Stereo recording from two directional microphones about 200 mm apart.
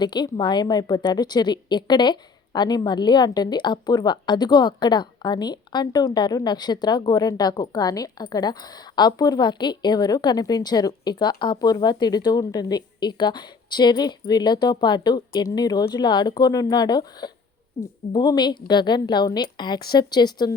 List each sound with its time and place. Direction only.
0.0 s a woman's voice: 20° left (ahead or behind)